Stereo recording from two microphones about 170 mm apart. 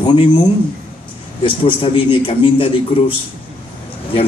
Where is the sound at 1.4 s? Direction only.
30° left (ahead or behind).